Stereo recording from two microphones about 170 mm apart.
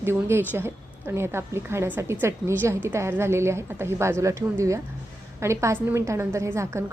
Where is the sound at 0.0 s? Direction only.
15° right (ahead or behind).